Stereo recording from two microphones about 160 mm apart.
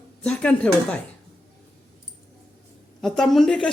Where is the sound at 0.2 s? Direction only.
5° left (ahead or behind).